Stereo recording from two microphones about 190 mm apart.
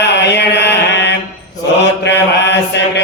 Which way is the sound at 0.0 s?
65° left (ahead or behind).